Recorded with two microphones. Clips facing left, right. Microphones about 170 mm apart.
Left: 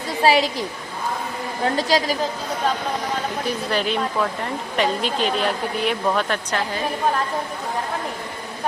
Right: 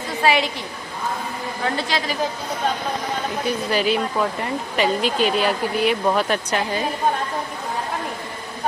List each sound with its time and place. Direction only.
0.2 s a woman's voice: 35° left (ahead or behind)
1.6 s a woman's voice: 40° left (ahead or behind)
3.4 s speech: 5° right (ahead or behind)